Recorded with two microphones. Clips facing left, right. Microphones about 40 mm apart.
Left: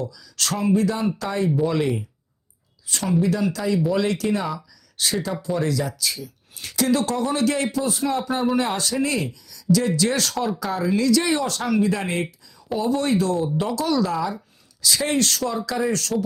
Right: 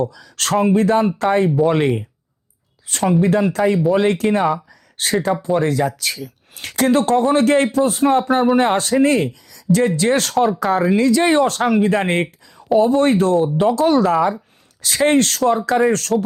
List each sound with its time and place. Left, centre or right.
0.0 s speech: right